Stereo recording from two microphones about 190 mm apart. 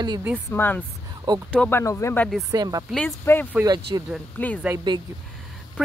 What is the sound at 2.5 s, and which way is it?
Speech, 20° right (ahead or behind).